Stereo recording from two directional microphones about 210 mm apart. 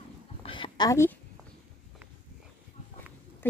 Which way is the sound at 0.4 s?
25° left (ahead or behind).